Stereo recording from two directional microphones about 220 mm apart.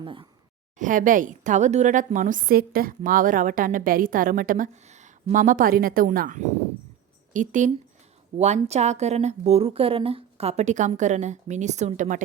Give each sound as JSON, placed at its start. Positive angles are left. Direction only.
{"t": 0.0, "sound": "speech", "side_deg": -20}
{"t": 0.8, "sound": "a woman's voice", "side_deg": -35}